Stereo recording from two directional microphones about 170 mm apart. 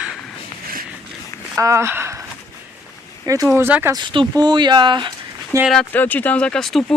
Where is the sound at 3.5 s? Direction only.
15° right (ahead or behind).